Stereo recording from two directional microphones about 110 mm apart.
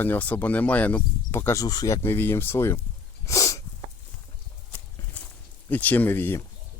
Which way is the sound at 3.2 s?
30° left (ahead or behind).